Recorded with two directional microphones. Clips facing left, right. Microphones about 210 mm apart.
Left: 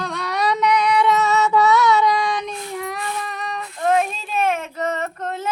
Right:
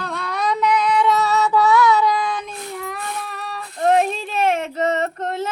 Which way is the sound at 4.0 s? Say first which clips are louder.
Right 2 dB; 30° right (ahead or behind).